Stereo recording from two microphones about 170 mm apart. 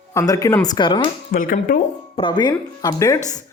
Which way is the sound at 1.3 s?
55° left (ahead or behind).